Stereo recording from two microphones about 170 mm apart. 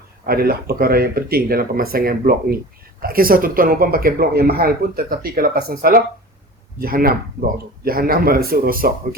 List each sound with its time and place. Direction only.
0.3 s speech: 60° right (ahead or behind)